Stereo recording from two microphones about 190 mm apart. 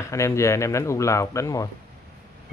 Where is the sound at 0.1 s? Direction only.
15° left (ahead or behind).